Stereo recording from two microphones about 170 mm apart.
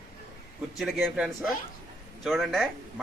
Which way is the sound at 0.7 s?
5° right (ahead or behind).